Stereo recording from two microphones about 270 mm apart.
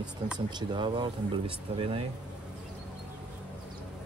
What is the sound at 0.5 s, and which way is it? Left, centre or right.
Speech, centre.